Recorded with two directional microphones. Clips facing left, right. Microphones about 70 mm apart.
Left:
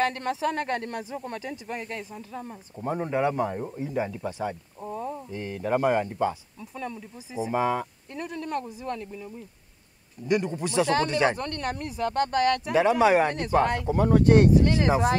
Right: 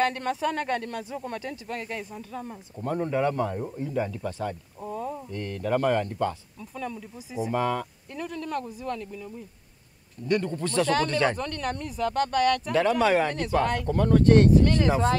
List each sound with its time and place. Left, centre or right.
0.0 s speech: centre
1.9 s speech: centre
2.8 s speech: centre
4.7 s speech: centre
5.3 s speech: centre
7.5 s speech: centre
12.0 s speech: left
12.6 s speech: centre